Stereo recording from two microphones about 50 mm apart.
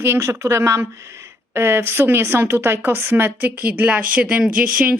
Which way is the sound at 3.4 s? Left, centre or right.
Right.